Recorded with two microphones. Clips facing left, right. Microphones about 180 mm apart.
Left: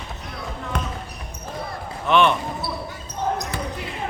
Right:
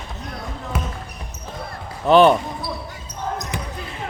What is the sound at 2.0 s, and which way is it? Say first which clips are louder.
Speech: right 6 dB; 35° right (ahead or behind).